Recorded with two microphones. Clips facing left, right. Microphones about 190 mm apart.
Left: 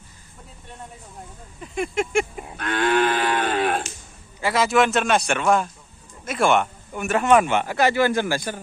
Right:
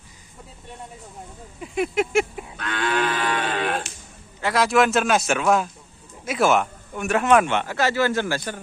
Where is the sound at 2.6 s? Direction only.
50° left (ahead or behind).